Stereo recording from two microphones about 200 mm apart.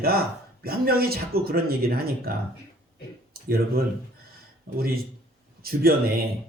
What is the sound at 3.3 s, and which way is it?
A man's voice, 50° right (ahead or behind).